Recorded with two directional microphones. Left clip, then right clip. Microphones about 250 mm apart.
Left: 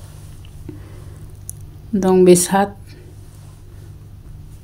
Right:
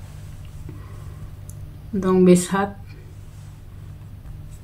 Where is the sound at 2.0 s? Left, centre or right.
Left.